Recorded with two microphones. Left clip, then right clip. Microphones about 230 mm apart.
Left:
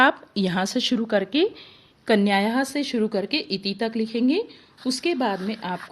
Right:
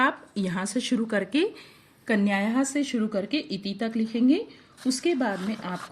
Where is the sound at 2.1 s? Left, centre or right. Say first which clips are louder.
Left 5 dB; left.